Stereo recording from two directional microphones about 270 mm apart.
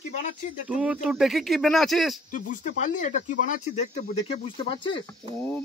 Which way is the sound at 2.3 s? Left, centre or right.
Left.